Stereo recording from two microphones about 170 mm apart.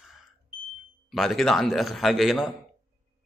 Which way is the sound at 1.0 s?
Centre (ahead or behind).